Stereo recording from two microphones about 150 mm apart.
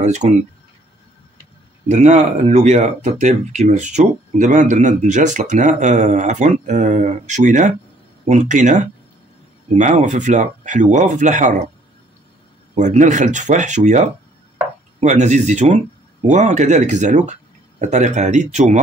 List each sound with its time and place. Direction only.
0.0 s speech: 50° right (ahead or behind)
1.9 s speech: 50° right (ahead or behind)
12.7 s speech: 55° right (ahead or behind)